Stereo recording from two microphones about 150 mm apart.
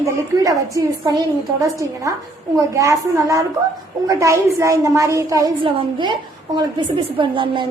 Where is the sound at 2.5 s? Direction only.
20° right (ahead or behind).